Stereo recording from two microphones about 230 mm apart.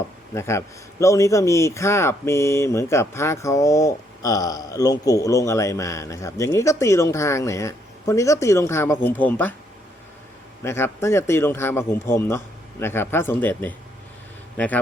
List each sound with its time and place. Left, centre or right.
0.3 s a man's voice: centre
10.6 s a man's voice: centre